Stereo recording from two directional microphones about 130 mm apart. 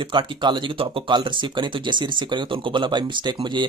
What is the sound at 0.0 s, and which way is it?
Speech, 40° right (ahead or behind).